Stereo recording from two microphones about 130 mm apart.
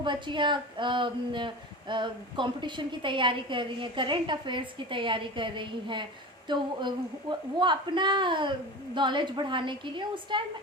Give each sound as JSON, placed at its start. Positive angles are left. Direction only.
{"t": 0.0, "sound": "a woman's voice", "side_deg": -40}